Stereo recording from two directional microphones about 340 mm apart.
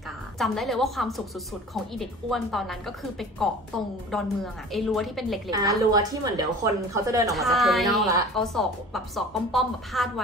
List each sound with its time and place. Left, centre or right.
0.4 s a woman's voice: centre
4.7 s a woman's voice: centre